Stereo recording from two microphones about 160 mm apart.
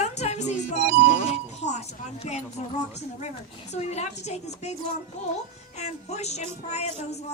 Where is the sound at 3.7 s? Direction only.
45° left (ahead or behind).